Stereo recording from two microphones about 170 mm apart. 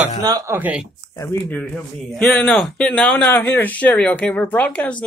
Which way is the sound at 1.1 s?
20° left (ahead or behind).